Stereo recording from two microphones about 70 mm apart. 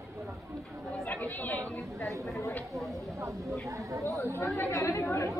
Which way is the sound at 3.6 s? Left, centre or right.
Right.